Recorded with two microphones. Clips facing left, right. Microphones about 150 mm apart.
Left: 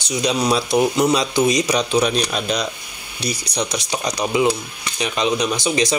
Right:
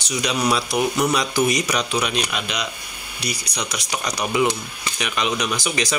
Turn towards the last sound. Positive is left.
turn(degrees=25)  # may be behind; listen again after turning